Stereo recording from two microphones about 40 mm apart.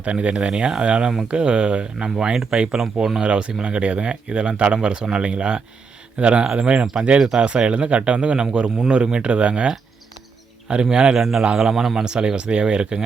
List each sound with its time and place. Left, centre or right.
0.0 s speech: right
2.1 s a man's voice: centre
11.1 s speech: centre
12.0 s speech: right